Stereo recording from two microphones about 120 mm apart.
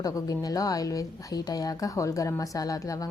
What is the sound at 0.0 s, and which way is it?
A woman's voice, 30° left (ahead or behind).